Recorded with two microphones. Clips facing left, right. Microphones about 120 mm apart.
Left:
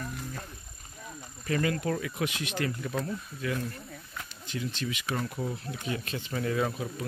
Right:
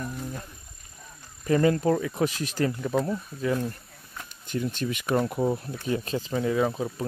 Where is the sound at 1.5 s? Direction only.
35° right (ahead or behind).